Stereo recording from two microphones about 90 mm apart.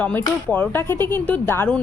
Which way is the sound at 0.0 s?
20° left (ahead or behind).